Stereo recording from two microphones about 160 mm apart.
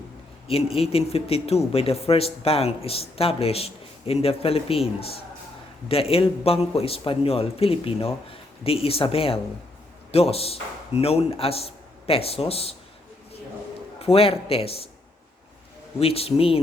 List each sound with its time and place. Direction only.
0.4 s a man's voice: 35° left (ahead or behind)
14.0 s a man's voice: 35° left (ahead or behind)
16.0 s a man's voice: 40° left (ahead or behind)